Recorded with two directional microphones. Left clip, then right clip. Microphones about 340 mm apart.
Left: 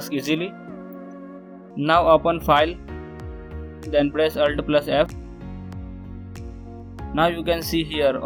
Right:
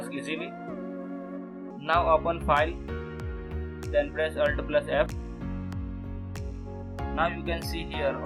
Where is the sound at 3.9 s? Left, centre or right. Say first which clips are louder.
Left 7 dB; centre.